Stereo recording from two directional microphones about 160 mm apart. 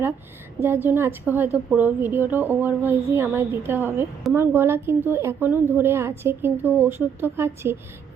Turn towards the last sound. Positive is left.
turn(degrees=-15)  # may be behind; listen again after turning